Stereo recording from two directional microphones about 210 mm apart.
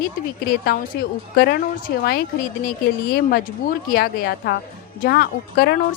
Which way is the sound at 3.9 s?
45° left (ahead or behind).